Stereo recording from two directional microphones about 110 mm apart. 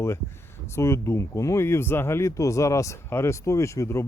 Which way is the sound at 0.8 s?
25° left (ahead or behind).